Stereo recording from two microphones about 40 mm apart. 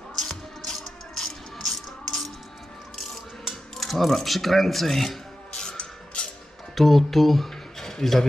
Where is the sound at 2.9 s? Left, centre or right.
Centre.